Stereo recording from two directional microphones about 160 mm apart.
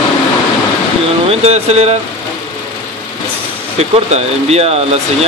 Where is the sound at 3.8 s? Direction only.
40° right (ahead or behind).